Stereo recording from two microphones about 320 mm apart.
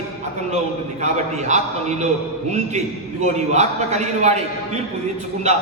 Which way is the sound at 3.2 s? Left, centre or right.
Right.